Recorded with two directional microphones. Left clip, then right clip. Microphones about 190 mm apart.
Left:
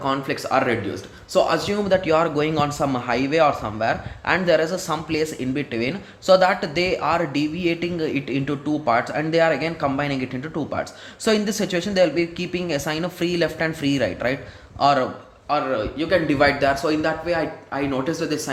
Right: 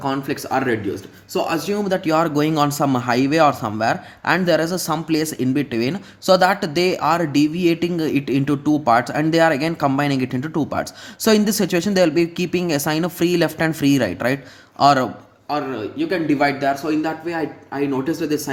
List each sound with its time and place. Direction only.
0.0 s speech: 25° right (ahead or behind)
15.4 s speech: 20° right (ahead or behind)